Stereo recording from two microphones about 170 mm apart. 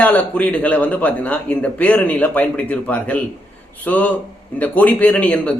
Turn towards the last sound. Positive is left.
turn(degrees=5)  # may be behind; listen again after turning